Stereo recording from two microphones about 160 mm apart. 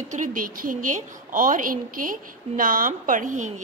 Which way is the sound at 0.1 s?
55° right (ahead or behind).